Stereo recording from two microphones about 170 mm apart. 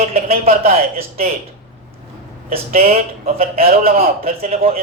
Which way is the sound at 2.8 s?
40° right (ahead or behind).